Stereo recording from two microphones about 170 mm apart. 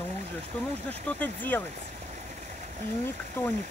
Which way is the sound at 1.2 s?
10° left (ahead or behind).